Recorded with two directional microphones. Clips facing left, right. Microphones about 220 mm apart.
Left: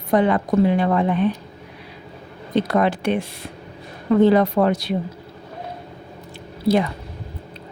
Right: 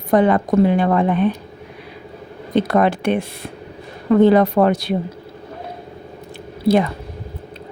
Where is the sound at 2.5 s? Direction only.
55° right (ahead or behind).